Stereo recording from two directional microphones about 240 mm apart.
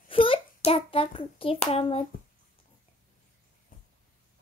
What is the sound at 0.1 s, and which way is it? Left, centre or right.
Hands, left.